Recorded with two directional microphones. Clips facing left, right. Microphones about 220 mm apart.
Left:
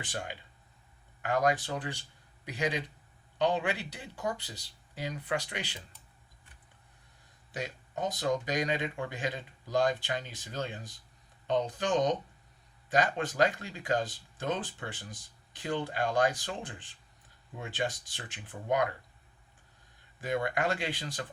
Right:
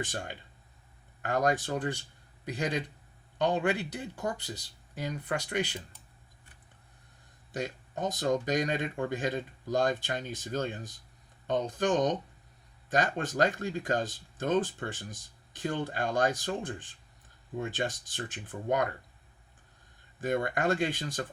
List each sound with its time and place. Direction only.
1.2 s speech: 45° right (ahead or behind)
7.5 s speech: 50° right (ahead or behind)
20.2 s speech: 50° right (ahead or behind)